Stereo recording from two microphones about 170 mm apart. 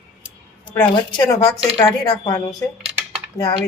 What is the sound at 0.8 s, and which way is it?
Speech, 25° left (ahead or behind).